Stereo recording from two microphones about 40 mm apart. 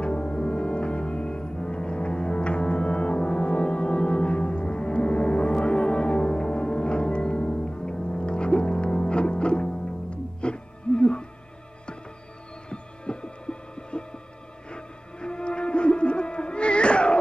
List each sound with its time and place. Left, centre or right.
0.0 s music: left
12.6 s music: left